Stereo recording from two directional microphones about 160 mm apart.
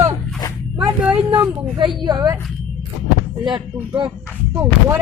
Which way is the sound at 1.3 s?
30° right (ahead or behind).